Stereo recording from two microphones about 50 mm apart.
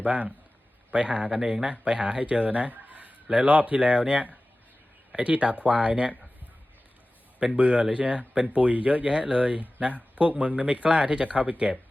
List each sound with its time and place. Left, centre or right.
0.0 s speech: right
1.3 s speech: centre
7.3 s speech: right